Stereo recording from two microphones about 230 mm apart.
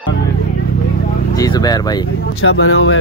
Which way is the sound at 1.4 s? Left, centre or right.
Centre.